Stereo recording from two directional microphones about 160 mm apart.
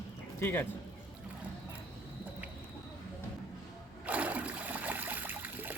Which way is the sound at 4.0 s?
10° right (ahead or behind).